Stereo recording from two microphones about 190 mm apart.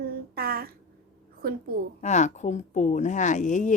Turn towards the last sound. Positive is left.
turn(degrees=40)  # may be behind; listen again after turning